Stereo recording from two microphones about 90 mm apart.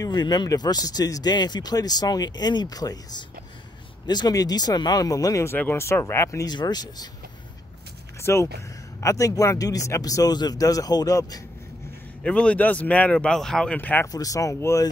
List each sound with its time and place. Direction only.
0.0 s speech: 50° left (ahead or behind)
5.5 s speech: 25° left (ahead or behind)
6.5 s speech: 50° left (ahead or behind)
8.2 s speech: 30° left (ahead or behind)
12.2 s speech: 15° left (ahead or behind)
14.0 s speech: 40° left (ahead or behind)